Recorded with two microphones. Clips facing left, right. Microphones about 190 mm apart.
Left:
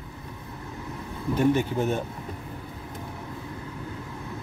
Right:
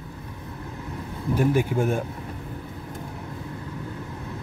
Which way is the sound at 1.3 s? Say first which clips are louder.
Right 1 dB; 10° right (ahead or behind).